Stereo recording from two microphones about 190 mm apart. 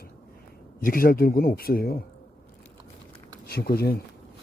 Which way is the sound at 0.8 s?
50° left (ahead or behind).